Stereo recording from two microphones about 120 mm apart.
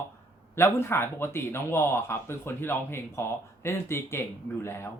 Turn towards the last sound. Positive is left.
turn(degrees=20)  # may be behind; listen again after turning